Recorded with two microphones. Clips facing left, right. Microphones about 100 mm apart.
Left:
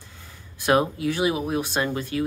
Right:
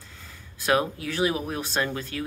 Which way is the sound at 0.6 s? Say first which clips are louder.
Left 3 dB; 20° left (ahead or behind).